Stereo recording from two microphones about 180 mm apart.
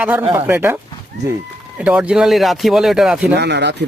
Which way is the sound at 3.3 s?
70° right (ahead or behind).